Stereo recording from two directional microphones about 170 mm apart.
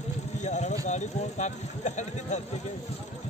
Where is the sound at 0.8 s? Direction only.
45° left (ahead or behind).